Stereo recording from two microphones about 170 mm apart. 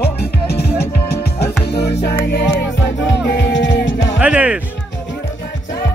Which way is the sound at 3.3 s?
90° left.